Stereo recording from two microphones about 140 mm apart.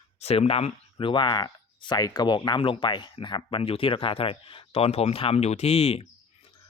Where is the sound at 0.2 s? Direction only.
45° left (ahead or behind).